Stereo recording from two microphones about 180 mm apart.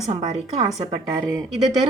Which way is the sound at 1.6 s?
20° right (ahead or behind).